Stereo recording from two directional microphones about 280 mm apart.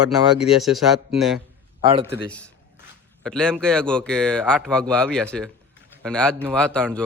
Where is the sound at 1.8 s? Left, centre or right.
Centre.